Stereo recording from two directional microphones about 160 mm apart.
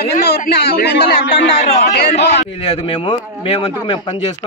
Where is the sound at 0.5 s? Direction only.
90° left.